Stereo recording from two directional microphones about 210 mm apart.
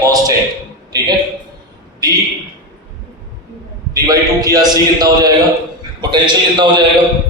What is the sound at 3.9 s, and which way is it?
A man's voice, 15° right (ahead or behind).